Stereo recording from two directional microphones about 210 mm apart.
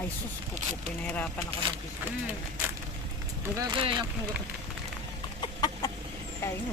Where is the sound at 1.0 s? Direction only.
10° left (ahead or behind).